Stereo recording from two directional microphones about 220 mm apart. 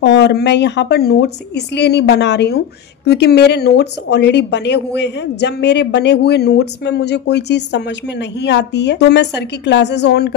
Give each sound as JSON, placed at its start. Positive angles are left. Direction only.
{"t": 0.0, "sound": "a woman's voice", "side_deg": 50}